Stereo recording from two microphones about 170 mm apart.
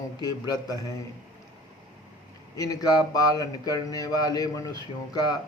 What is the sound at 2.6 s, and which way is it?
A man's voice, 20° left (ahead or behind).